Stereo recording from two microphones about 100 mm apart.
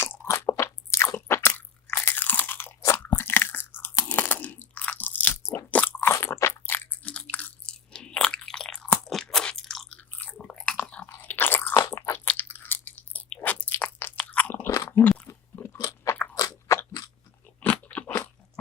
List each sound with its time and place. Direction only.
0.3 s crunch: 30° left (ahead or behind); by 9.9 s 5° left (ahead or behind)
9.9 s biting: 15° left (ahead or behind)
11.1 s crunch: 20° left (ahead or behind)
11.9 s biting: 25° left (ahead or behind)
14.7 s chewing: 30° left (ahead or behind)
15.3 s crunch: 25° left (ahead or behind)
17.6 s crunch: 15° left (ahead or behind)